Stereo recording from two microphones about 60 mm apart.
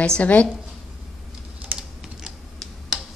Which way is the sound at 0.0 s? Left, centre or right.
Centre.